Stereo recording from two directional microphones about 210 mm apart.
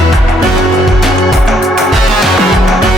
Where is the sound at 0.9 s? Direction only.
Centre (ahead or behind).